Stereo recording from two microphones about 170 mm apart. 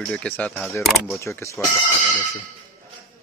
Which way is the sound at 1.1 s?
15° left (ahead or behind).